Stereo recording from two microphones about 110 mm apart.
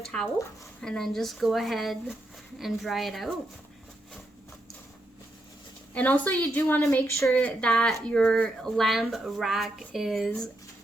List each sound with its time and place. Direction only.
0.0 s speech: 5° left (ahead or behind)
5.9 s a woman's voice: 15° left (ahead or behind)